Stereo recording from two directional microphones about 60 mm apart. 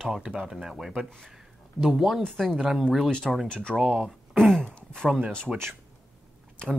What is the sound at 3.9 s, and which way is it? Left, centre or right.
Throat clearing, centre.